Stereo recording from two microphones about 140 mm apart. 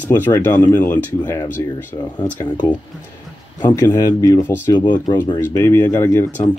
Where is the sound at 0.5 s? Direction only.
25° left (ahead or behind).